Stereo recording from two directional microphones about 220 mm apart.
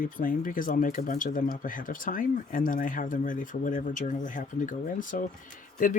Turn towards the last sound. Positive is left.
turn(degrees=35)  # may be behind; listen again after turning